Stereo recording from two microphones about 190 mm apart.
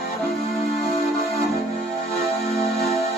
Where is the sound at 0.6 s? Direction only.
35° left (ahead or behind).